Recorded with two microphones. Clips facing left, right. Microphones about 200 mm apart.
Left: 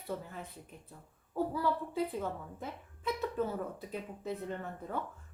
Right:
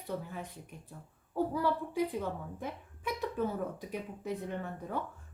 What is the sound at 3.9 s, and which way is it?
Speech, 15° right (ahead or behind).